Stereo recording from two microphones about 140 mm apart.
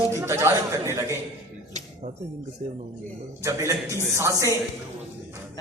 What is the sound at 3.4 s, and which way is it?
A man's voice, 20° right (ahead or behind).